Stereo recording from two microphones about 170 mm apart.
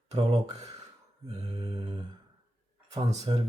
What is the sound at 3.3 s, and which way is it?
Speech, 30° right (ahead or behind).